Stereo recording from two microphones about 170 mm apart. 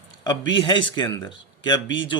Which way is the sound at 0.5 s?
30° left (ahead or behind).